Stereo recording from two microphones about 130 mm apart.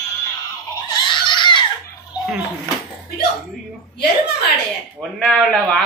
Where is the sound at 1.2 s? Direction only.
35° left (ahead or behind).